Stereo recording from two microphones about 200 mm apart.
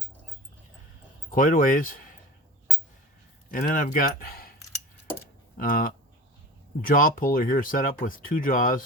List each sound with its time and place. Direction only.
1.3 s speech: 40° left (ahead or behind)
3.5 s speech: 45° left (ahead or behind)
5.5 s speech: 45° left (ahead or behind)